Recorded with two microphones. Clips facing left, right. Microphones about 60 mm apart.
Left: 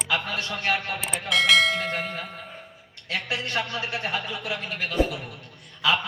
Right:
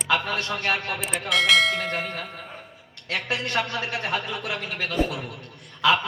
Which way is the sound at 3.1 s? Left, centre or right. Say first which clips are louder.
Right 2 dB; right.